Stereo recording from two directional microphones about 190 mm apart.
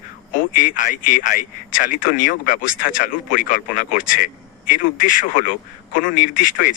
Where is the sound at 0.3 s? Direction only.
45° left (ahead or behind).